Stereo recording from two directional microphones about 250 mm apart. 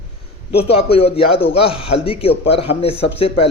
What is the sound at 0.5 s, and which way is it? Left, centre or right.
A man's voice, left.